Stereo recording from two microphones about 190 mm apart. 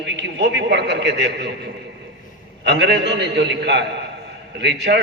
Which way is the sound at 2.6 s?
60° right (ahead or behind).